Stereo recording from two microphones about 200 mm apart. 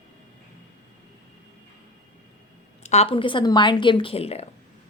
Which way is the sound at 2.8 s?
30° left (ahead or behind).